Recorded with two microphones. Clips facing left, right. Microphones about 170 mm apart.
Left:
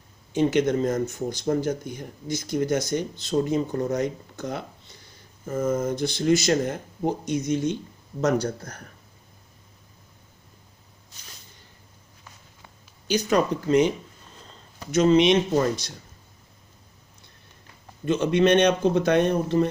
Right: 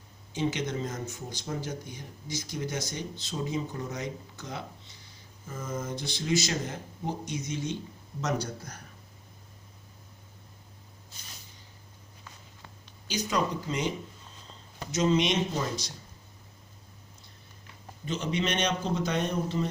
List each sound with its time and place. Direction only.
0.3 s speech: 55° left (ahead or behind)
13.1 s speech: 60° left (ahead or behind)
14.9 s speech: 60° left (ahead or behind)
18.0 s speech: 60° left (ahead or behind)